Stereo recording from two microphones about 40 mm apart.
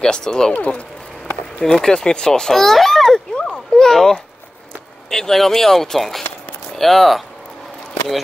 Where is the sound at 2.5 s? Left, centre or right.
Centre.